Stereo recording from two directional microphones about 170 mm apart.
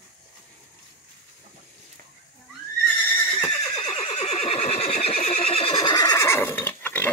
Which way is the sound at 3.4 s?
25° left (ahead or behind).